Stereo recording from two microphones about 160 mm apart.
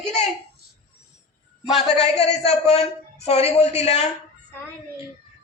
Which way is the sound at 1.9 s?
40° left (ahead or behind).